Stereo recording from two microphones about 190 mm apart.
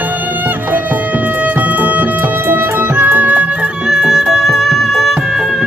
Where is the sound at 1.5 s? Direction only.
10° right (ahead or behind).